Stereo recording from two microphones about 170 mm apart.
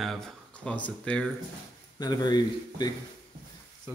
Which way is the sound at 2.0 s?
25° left (ahead or behind).